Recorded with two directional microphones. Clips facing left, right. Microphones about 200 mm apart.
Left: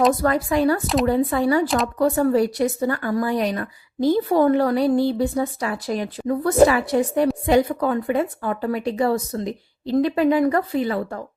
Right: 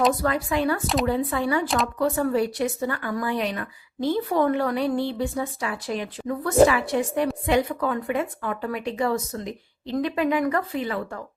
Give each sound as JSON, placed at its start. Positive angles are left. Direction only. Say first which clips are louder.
{"t": 0.2, "sound": "a woman's voice", "louder": "left 4 dB", "side_deg": 45}
{"t": 1.6, "sound": "speech", "louder": "left 3 dB", "side_deg": 0}
{"t": 2.0, "sound": "a woman's voice", "louder": "left 5 dB", "side_deg": 40}